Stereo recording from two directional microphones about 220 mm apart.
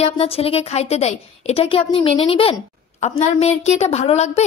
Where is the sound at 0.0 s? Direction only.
25° left (ahead or behind).